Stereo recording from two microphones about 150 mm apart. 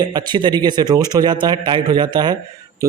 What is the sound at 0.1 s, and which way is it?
Speech, 30° right (ahead or behind).